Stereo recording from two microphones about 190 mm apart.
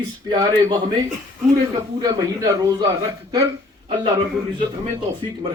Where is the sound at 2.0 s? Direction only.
20° right (ahead or behind).